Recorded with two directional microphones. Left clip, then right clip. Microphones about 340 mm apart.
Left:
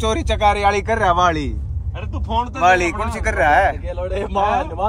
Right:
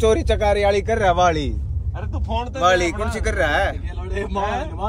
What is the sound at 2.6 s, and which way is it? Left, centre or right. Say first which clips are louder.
A man's voice: left 2 dB; centre.